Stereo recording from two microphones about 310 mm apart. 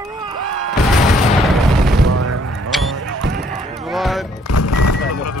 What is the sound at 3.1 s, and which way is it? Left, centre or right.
Music, right.